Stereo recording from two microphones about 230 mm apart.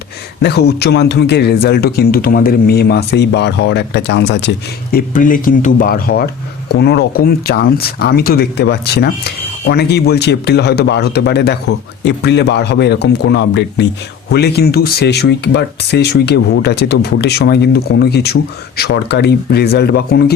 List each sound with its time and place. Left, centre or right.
0.4 s speech: left